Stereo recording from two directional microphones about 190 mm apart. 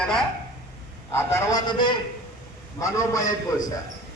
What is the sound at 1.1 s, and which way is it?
A man's voice, 15° left (ahead or behind).